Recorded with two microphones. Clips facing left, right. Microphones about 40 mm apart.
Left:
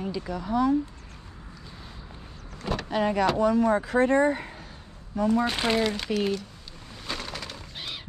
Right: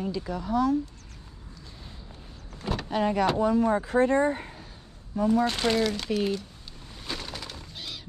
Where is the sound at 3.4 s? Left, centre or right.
Left.